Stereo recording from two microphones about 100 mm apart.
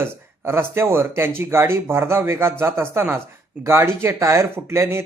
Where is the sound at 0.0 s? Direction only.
25° right (ahead or behind).